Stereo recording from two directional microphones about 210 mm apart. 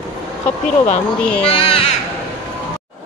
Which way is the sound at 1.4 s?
25° left (ahead or behind).